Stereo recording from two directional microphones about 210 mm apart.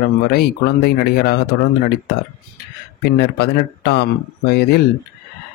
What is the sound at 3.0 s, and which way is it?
Speech, 50° left (ahead or behind).